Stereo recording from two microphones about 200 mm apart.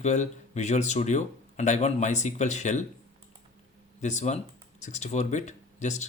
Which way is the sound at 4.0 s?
35° left (ahead or behind).